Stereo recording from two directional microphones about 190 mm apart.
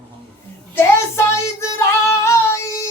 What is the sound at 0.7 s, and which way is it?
Female singing, 15° left (ahead or behind).